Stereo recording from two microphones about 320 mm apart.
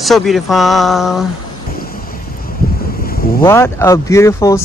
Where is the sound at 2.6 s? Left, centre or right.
Left.